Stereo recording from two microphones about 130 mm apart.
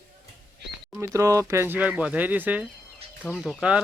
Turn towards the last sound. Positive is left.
turn(degrees=5)  # may be behind; listen again after turning